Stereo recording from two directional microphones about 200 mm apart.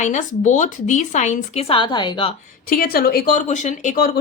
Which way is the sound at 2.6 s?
45° left (ahead or behind).